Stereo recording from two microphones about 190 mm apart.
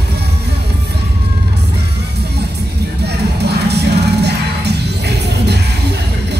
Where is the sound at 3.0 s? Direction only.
60° right (ahead or behind).